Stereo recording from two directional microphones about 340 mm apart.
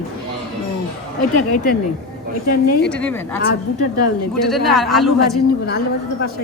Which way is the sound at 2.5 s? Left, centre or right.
Left.